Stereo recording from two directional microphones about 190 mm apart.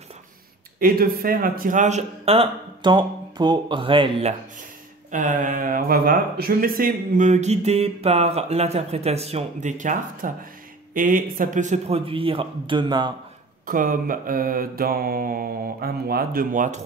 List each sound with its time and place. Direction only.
0.7 s speech: 50° right (ahead or behind); by 4.4 s 30° right (ahead or behind)
5.1 s a man's voice: 45° right (ahead or behind); by 13.1 s 25° right (ahead or behind)
13.7 s mantra: 45° right (ahead or behind)